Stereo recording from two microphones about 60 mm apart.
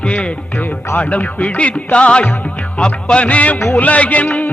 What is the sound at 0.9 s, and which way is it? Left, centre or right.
Music, left.